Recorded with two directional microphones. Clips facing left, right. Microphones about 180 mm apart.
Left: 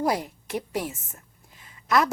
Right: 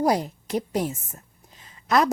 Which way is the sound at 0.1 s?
40° right (ahead or behind).